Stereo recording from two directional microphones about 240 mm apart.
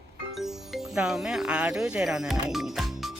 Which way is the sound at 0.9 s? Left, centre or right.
Centre.